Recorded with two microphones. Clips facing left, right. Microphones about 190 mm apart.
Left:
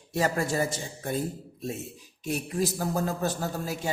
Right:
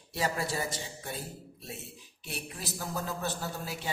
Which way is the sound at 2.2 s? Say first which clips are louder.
Left 12 dB; 45° left (ahead or behind).